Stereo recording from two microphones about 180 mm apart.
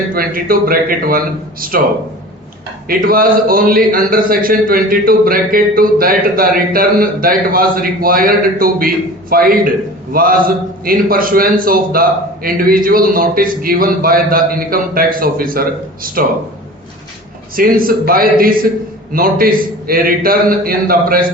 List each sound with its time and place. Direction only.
0.1 s a man's voice: 55° right (ahead or behind)
2.8 s a man's voice: 55° right (ahead or behind)
17.5 s a man's voice: 50° right (ahead or behind)